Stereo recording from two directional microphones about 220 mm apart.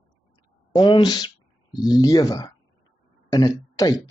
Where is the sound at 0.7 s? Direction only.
20° left (ahead or behind).